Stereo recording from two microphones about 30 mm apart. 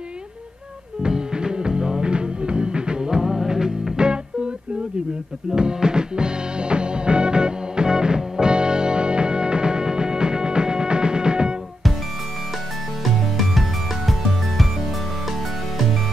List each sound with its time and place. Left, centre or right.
1.0 s music: right
5.5 s music: right
13.0 s music: centre